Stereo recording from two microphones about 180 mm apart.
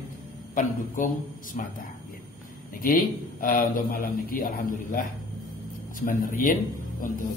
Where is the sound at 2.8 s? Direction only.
50° left (ahead or behind).